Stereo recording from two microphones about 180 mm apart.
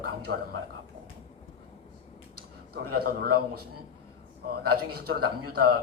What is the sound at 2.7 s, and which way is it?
Speech, 60° right (ahead or behind).